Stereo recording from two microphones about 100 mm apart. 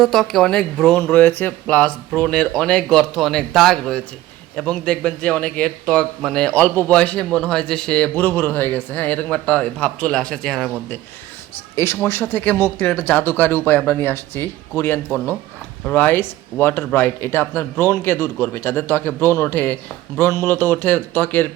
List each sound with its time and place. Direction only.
0.0 s a man's voice: centre (ahead or behind)
12.0 s a man's voice: 25° left (ahead or behind)